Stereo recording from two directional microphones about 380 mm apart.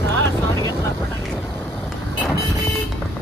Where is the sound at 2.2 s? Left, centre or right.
Centre.